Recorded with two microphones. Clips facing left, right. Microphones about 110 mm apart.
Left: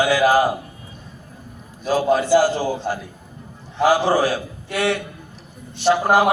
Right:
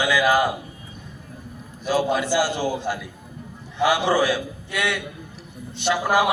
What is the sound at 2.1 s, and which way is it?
A man's voice, 35° left (ahead or behind).